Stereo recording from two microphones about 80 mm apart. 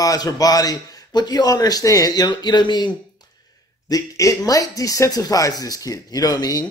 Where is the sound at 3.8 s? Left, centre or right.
Left.